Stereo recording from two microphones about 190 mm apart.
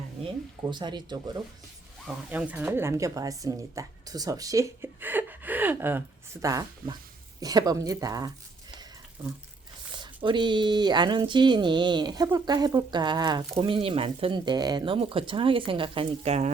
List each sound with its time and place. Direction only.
0.7 s speech: 25° right (ahead or behind)
2.0 s speech: 5° right (ahead or behind)
10.0 s speech: 25° right (ahead or behind)